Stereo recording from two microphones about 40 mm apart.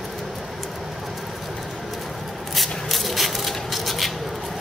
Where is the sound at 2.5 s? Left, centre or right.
Centre.